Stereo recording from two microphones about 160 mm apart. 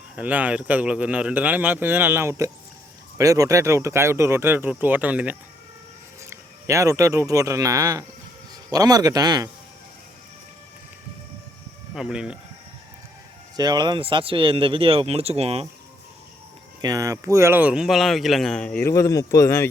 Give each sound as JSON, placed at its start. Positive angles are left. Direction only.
{"t": 0.2, "sound": "a man's voice", "side_deg": -10}
{"t": 11.9, "sound": "speech", "side_deg": -5}
{"t": 13.6, "sound": "speech", "side_deg": -25}
{"t": 16.8, "sound": "speech", "side_deg": -20}